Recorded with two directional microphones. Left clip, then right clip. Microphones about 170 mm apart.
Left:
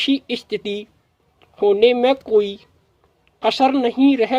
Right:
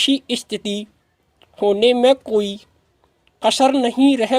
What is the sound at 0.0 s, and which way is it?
Speech, 35° right (ahead or behind).